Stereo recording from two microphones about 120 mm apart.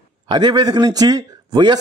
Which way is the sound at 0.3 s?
35° right (ahead or behind).